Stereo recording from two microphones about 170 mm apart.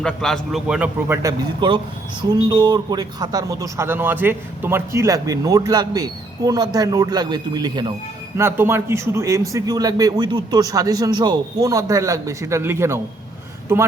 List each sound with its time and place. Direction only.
0.0 s a man's voice: 5° left (ahead or behind); by 7.9 s 25° right (ahead or behind)
8.4 s a man's voice: 15° right (ahead or behind)